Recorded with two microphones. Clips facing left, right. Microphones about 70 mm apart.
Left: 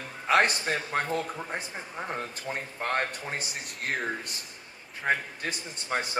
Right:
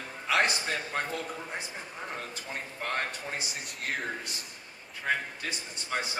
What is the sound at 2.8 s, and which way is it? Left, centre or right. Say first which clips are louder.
Speech: left 3 dB; left.